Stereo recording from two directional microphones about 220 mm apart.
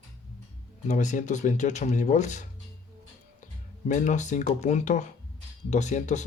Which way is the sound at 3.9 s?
35° left (ahead or behind).